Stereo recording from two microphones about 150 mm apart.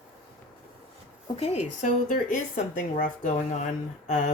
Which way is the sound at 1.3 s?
45° left (ahead or behind).